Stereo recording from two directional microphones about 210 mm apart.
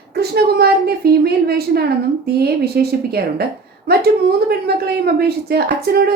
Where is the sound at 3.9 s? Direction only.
50° right (ahead or behind).